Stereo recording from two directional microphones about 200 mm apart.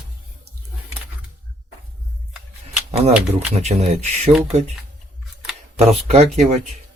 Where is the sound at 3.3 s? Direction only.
30° right (ahead or behind).